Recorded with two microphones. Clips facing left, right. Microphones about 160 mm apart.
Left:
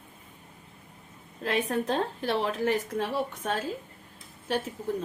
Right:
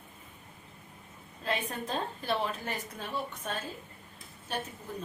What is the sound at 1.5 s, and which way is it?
A woman's voice, 90° left.